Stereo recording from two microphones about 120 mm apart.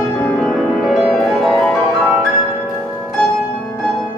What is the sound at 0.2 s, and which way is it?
Music, 15° left (ahead or behind).